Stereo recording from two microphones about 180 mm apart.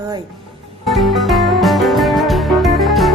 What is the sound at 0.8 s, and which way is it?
Music, centre (ahead or behind).